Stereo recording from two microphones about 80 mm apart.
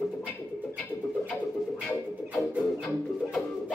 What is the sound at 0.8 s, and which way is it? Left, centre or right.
Music, centre.